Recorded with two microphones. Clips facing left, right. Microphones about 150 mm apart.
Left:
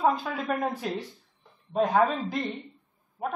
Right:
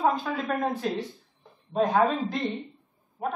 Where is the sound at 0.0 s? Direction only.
5° left (ahead or behind).